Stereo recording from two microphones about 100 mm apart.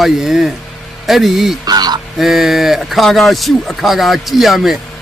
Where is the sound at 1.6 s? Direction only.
45° right (ahead or behind).